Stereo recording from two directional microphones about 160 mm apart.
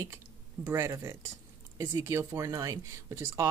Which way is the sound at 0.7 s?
15° right (ahead or behind).